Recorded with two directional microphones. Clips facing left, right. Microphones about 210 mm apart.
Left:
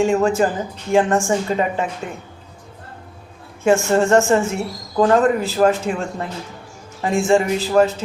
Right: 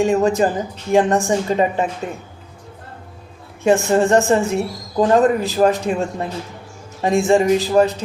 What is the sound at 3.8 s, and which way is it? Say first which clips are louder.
A man's voice: even; 15° right (ahead or behind).